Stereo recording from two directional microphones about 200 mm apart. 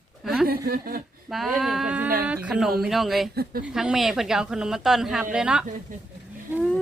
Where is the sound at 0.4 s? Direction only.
50° right (ahead or behind).